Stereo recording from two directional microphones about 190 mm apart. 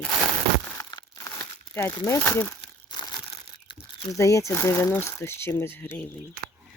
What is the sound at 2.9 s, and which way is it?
Crumpling, 20° left (ahead or behind).